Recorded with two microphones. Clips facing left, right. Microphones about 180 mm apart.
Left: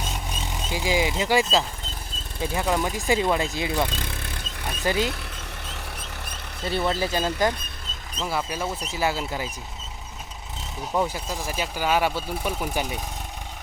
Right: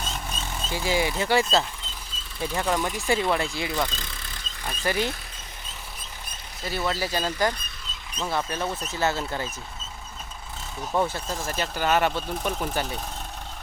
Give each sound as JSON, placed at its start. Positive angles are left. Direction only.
{"t": 0.0, "sound": "vehicle", "side_deg": 15}
{"t": 2.4, "sound": "speech", "side_deg": 15}
{"t": 3.8, "sound": "vehicle", "side_deg": 60}
{"t": 4.8, "sound": "speech", "side_deg": 15}
{"t": 5.6, "sound": "vehicle", "side_deg": 70}
{"t": 6.7, "sound": "speech", "side_deg": 25}
{"t": 8.3, "sound": "speech", "side_deg": 10}
{"t": 11.1, "sound": "speech", "side_deg": 10}